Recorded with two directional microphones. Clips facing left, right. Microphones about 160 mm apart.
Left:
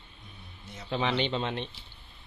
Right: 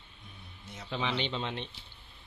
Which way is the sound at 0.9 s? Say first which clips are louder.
Left 5 dB; 50° left (ahead or behind).